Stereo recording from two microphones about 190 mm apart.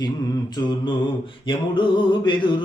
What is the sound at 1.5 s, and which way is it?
Mantra, 25° left (ahead or behind).